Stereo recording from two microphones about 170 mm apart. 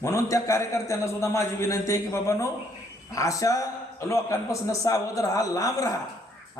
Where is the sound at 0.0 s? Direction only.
15° left (ahead or behind).